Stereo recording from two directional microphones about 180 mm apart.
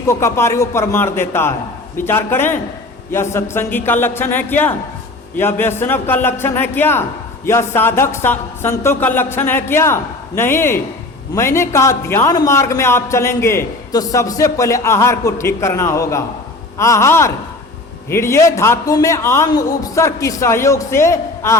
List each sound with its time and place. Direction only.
0.1 s a man's voice: 15° left (ahead or behind)